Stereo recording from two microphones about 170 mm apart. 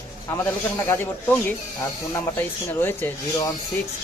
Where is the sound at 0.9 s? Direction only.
10° left (ahead or behind).